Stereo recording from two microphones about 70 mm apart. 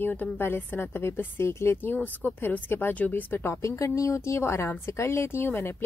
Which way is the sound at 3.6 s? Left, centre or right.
Left.